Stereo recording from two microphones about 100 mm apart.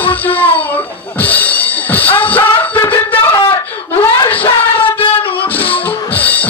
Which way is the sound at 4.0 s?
15° left (ahead or behind).